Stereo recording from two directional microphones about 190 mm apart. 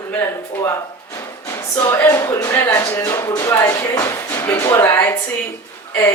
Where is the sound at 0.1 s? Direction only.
15° left (ahead or behind).